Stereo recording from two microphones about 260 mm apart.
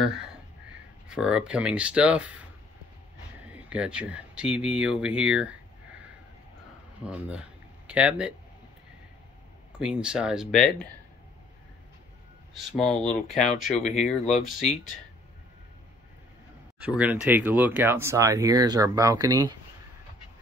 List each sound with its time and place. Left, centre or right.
0.0 s speech: centre
9.7 s speech: centre
12.5 s speech: centre
13.7 s speech: left
16.8 s speech: centre